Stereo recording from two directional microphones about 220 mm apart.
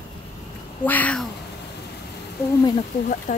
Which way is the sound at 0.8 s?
5° left (ahead or behind).